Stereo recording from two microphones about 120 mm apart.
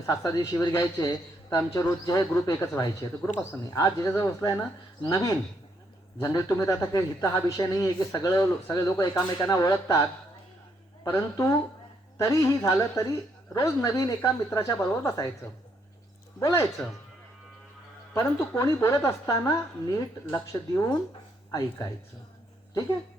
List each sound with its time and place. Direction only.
0.0 s speech: 25° left (ahead or behind)
3.2 s speech: 10° left (ahead or behind)
3.7 s speech: 25° left (ahead or behind)
11.0 s speech: 30° left (ahead or behind)
16.4 s speech: 25° left (ahead or behind)
18.1 s speech: 25° left (ahead or behind)